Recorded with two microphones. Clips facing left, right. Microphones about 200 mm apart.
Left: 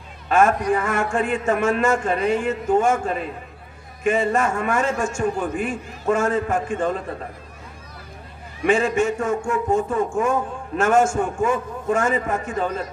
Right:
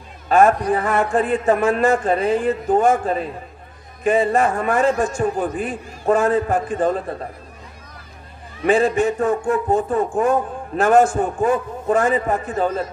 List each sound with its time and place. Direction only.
0.3 s a man's voice: 35° right (ahead or behind)
8.6 s a man's voice: 35° right (ahead or behind)